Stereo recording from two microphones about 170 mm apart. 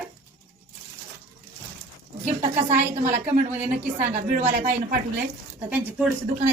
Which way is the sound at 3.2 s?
10° right (ahead or behind).